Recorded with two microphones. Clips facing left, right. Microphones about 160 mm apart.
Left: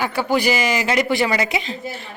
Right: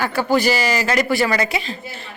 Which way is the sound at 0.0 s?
15° left (ahead or behind).